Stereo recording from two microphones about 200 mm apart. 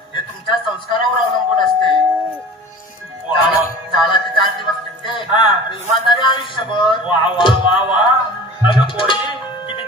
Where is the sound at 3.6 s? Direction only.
25° left (ahead or behind).